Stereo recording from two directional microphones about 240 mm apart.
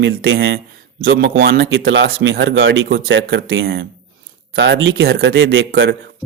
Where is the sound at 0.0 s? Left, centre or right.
Right.